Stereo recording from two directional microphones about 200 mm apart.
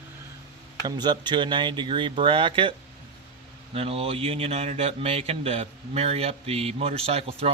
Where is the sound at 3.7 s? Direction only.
30° right (ahead or behind).